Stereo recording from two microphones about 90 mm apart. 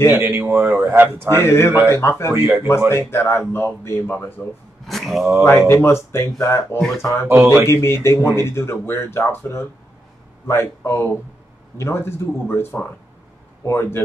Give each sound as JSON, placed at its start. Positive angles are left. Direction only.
{"t": 0.1, "sound": "a man's voice", "side_deg": -25}
{"t": 1.3, "sound": "speech", "side_deg": 25}
{"t": 2.3, "sound": "a man's voice", "side_deg": -25}
{"t": 2.9, "sound": "speech", "side_deg": 25}
{"t": 4.8, "sound": "mantra", "side_deg": 0}
{"t": 5.4, "sound": "speech", "side_deg": 30}
{"t": 7.2, "sound": "a man's voice", "side_deg": -20}
{"t": 7.6, "sound": "speech", "side_deg": 30}
{"t": 13.7, "sound": "speech", "side_deg": 30}